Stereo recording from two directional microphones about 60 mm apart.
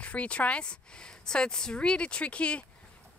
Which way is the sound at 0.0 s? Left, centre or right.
Left.